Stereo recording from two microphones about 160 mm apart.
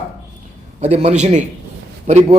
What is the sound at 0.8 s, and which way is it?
A man's voice, 45° right (ahead or behind).